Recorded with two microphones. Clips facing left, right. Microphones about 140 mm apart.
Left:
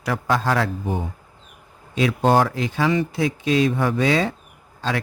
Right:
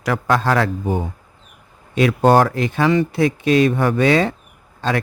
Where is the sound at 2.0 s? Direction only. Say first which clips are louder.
Right 4 dB; 65° right (ahead or behind).